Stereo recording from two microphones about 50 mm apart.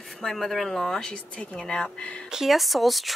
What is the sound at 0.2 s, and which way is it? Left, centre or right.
Speech, centre.